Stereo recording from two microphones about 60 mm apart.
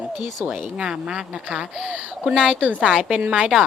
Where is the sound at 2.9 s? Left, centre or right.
Centre.